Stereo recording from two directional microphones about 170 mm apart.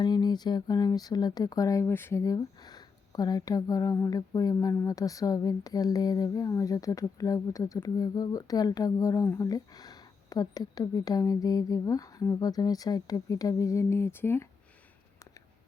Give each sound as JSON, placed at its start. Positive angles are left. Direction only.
{"t": 0.0, "sound": "speech", "side_deg": 25}